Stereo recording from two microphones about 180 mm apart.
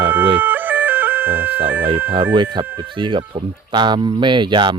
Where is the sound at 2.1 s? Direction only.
25° right (ahead or behind).